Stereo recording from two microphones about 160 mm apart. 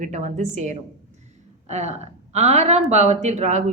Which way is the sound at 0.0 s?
50° right (ahead or behind).